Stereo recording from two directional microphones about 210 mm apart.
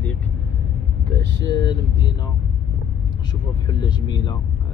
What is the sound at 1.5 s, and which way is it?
Speech, 20° left (ahead or behind).